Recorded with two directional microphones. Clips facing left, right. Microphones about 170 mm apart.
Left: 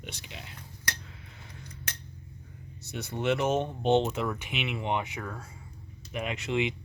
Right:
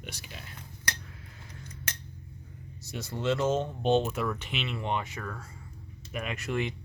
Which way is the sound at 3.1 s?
20° left (ahead or behind).